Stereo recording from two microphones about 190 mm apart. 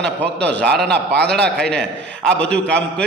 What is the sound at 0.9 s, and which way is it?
Speech, 60° right (ahead or behind).